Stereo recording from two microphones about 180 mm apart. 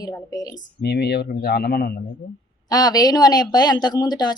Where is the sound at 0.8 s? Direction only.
65° left (ahead or behind).